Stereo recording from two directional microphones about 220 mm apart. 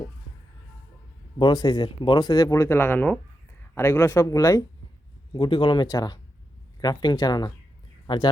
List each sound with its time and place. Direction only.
1.4 s speech: 20° left (ahead or behind)